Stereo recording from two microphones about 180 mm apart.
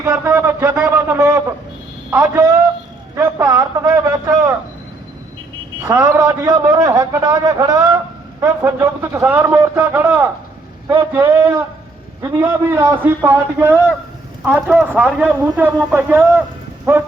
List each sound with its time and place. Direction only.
0.0 s a man's voice: 15° right (ahead or behind)
3.2 s a sound: 15° right (ahead or behind)
5.8 s a man's voice: 20° right (ahead or behind)